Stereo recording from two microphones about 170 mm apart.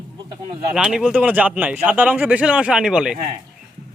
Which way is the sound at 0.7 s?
5° right (ahead or behind).